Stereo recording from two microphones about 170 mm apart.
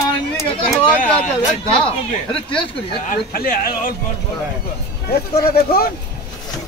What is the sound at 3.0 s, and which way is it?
Speech, 55° left (ahead or behind).